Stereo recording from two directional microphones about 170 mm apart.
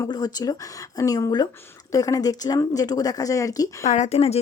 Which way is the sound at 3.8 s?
45° left (ahead or behind).